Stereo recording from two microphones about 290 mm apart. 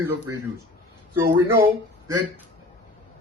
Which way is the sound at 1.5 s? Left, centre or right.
Centre.